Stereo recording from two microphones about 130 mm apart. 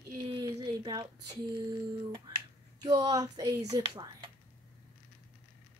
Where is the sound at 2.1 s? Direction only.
30° right (ahead or behind).